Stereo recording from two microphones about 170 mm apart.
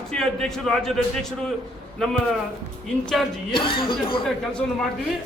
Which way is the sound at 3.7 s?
30° left (ahead or behind).